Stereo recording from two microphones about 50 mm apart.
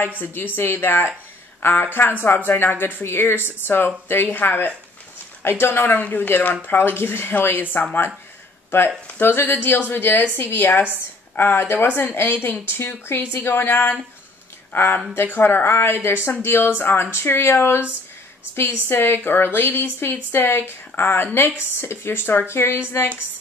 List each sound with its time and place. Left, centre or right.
0.2 s speech: left
5.9 s speech: left